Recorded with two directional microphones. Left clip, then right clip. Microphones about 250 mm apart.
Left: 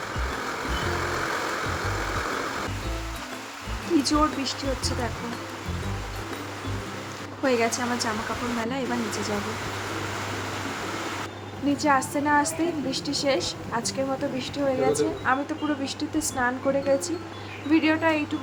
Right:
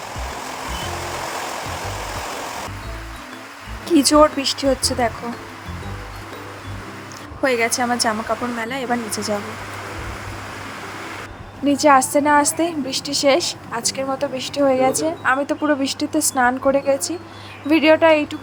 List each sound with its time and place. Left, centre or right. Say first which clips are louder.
4.0 s a woman's voice: right 13 dB; right
7.4 s a woman's voice: right 6 dB; right
11.8 s a woman's voice: right 10 dB; right